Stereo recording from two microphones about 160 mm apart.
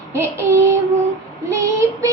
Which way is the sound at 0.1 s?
15° right (ahead or behind).